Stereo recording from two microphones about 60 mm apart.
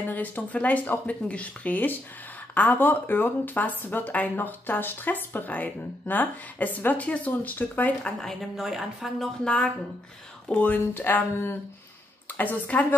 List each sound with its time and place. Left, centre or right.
0.1 s speech: left
8.0 s a woman's voice: centre
8.5 s a woman's voice: centre
9.4 s a woman's voice: centre
10.5 s speech: left
11.0 s speech: left
12.4 s speech: left